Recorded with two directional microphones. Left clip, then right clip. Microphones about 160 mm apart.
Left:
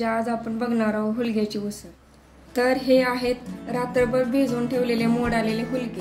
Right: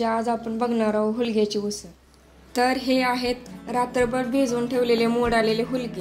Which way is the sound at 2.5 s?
55° right (ahead or behind).